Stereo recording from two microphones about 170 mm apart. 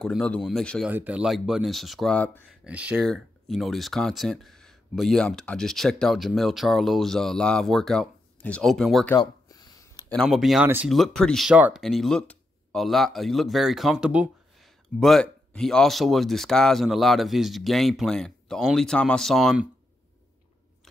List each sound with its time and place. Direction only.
0.0 s speech: 5° left (ahead or behind)
0.8 s speech: 10° right (ahead or behind); by 2.4 s 10° left (ahead or behind)
2.6 s speech: 5° right (ahead or behind)
9.2 s a sound: 20° left (ahead or behind)
10.0 s speech: centre (ahead or behind)